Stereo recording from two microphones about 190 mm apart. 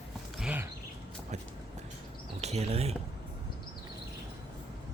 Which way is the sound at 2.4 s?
35° right (ahead or behind).